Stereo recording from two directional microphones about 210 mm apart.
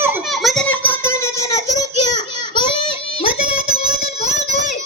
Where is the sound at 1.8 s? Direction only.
20° left (ahead or behind).